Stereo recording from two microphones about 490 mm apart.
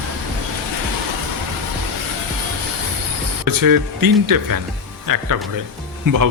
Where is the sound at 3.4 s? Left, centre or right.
Right.